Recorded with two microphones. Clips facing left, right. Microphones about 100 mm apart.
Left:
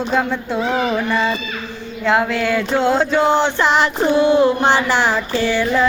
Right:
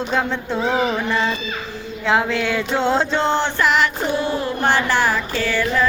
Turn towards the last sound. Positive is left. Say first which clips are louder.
# left 3 dB
turn(degrees=25)  # may be behind; listen again after turning